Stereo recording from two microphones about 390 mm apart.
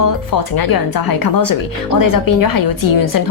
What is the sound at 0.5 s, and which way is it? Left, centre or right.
Speech, left.